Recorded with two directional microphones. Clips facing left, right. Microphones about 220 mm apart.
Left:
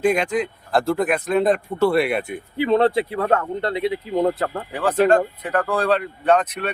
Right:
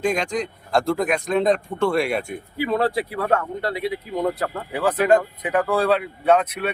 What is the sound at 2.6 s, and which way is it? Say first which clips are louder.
Speech: left 4 dB; 25° left (ahead or behind).